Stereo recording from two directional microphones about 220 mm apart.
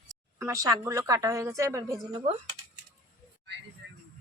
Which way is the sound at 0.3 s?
15° right (ahead or behind).